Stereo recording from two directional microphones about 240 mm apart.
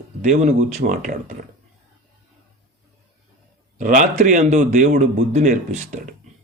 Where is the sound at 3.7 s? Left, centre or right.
Right.